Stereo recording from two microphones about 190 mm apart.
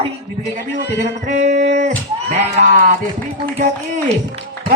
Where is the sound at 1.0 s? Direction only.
40° right (ahead or behind).